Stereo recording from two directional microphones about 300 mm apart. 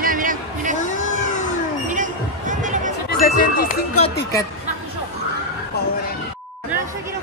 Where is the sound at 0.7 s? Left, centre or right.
Left.